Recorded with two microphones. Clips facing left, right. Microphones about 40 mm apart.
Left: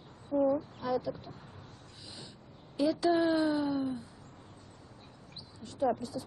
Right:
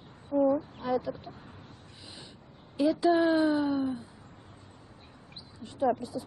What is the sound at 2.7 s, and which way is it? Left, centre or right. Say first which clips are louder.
A woman's voice: right 3 dB; centre.